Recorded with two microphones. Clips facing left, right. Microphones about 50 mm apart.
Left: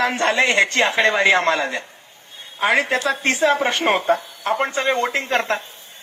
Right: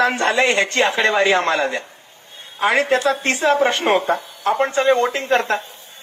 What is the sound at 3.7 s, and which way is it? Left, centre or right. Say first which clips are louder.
A man's voice: right 1 dB; left.